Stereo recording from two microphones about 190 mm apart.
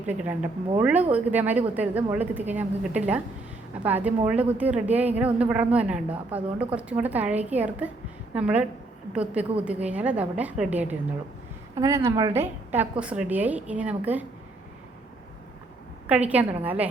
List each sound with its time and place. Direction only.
0.0 s a woman's voice: 10° right (ahead or behind)
16.3 s a woman's voice: 10° right (ahead or behind)